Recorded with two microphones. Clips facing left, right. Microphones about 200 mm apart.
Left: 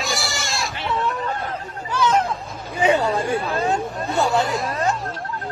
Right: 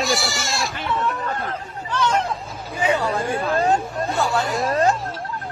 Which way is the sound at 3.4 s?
40° right (ahead or behind).